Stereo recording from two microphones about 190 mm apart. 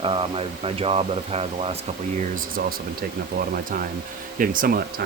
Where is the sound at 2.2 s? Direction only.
45° right (ahead or behind).